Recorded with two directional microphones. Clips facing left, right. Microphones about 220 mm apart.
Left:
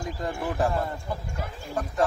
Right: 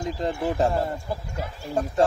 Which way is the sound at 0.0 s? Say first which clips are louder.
Right 4 dB; 20° right (ahead or behind).